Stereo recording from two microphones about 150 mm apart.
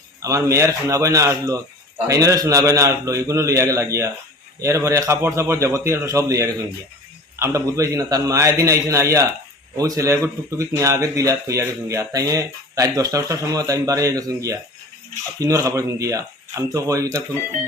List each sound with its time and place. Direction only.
0.2 s a man's voice: 20° right (ahead or behind)